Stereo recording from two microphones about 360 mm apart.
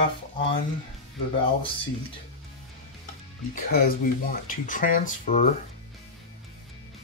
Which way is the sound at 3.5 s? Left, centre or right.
Left.